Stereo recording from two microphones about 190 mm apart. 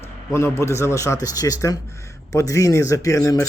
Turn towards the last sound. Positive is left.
turn(degrees=15)  # may be behind; listen again after turning